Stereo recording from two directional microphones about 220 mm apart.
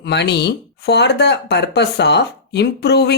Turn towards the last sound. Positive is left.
turn(degrees=50)  # may be behind; listen again after turning